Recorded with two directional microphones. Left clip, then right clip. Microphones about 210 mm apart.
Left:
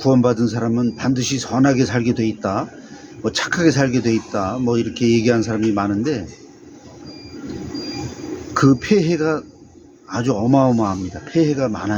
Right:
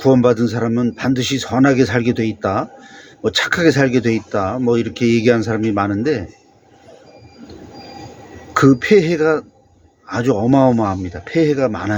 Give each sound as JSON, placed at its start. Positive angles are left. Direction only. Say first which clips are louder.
{"t": 0.0, "sound": "speech", "louder": "right 3 dB", "side_deg": -20}
{"t": 8.5, "sound": "speech", "louder": "right 4 dB", "side_deg": -20}